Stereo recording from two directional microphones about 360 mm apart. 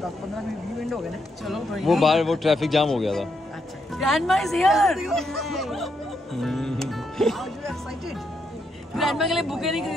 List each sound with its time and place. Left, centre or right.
1.4 s speech: centre
6.3 s music: centre
8.9 s speech: centre